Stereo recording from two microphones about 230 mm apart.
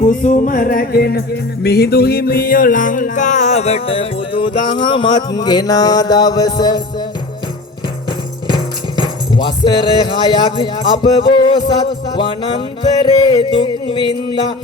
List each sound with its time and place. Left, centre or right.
0.0 s music: left; by 6.8 s centre
8.5 s music: centre